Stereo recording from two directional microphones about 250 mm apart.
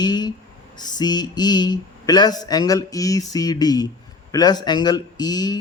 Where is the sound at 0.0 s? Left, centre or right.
Centre.